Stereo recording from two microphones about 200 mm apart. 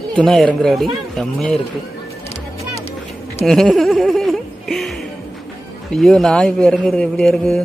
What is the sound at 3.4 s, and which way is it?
Music, centre (ahead or behind).